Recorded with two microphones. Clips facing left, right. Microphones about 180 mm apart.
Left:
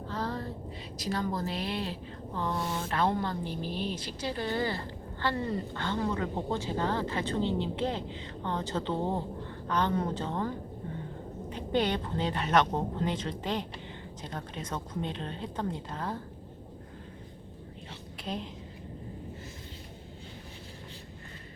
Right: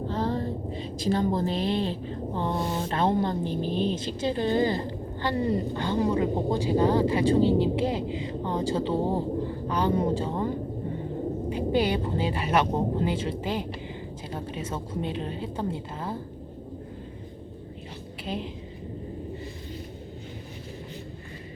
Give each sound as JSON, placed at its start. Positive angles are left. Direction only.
{"t": 0.1, "sound": "a woman's voice", "side_deg": -25}
{"t": 18.3, "sound": "a woman's voice", "side_deg": 0}